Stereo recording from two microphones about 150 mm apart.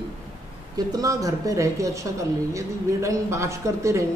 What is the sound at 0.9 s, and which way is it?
A man's voice, 25° right (ahead or behind).